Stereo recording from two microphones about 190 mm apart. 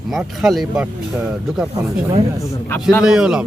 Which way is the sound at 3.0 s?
5° right (ahead or behind).